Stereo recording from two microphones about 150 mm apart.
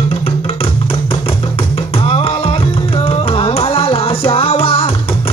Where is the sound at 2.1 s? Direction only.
40° left (ahead or behind).